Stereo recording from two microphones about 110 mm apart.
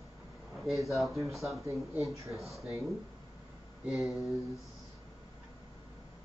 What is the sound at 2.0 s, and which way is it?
Speech, 30° right (ahead or behind).